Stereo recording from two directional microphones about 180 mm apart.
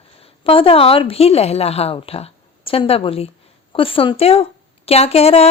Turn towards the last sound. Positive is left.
turn(degrees=35)  # may be behind; listen again after turning